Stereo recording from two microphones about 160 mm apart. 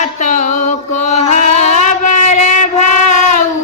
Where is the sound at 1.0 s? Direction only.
45° left (ahead or behind).